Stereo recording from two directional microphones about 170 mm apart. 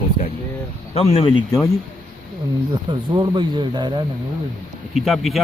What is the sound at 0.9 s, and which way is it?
Speech, 35° left (ahead or behind).